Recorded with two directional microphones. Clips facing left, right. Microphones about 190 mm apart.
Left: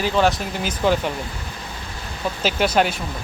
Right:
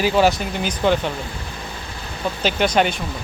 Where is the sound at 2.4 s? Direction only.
5° left (ahead or behind).